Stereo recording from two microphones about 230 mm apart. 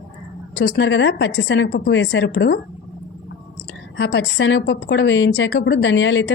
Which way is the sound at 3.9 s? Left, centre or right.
Left.